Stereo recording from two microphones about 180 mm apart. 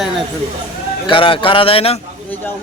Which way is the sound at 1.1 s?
30° left (ahead or behind).